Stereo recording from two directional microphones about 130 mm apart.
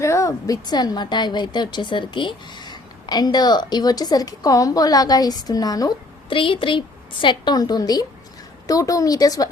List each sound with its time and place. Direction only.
0.0 s speech: 25° left (ahead or behind)
6.3 s a woman's voice: 40° left (ahead or behind)